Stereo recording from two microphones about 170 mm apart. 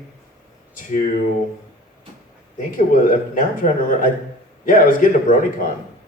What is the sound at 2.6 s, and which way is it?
A man's voice, 55° left (ahead or behind).